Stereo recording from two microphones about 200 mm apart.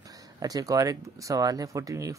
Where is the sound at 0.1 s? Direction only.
20° right (ahead or behind).